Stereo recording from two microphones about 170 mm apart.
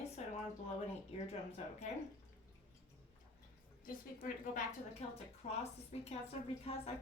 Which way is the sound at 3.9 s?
55° left (ahead or behind).